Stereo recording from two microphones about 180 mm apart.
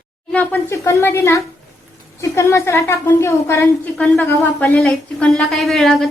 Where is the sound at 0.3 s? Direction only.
10° left (ahead or behind).